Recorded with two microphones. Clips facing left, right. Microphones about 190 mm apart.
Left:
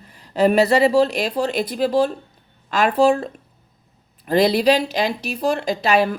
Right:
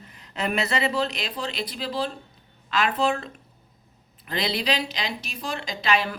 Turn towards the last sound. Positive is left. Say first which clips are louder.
# left 7 dB
turn(degrees=50)  # may be behind; listen again after turning